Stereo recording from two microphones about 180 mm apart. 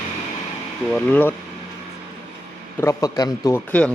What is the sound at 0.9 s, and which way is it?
Speech, 10° left (ahead or behind).